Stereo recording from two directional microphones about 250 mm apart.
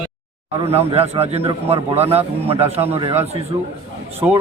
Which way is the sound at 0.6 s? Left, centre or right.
Right.